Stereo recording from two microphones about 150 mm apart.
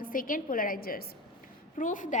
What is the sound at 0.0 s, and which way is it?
A woman's voice, 65° left (ahead or behind).